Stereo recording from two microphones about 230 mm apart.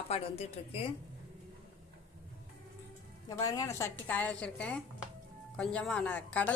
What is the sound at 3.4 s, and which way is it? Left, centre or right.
A woman's voice, centre.